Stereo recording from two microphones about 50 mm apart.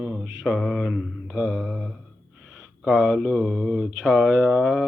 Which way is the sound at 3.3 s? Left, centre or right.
Centre.